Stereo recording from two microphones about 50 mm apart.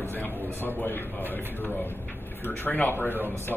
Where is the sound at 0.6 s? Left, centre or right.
Left.